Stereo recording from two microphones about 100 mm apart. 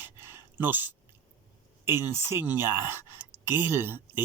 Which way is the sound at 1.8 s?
25° right (ahead or behind).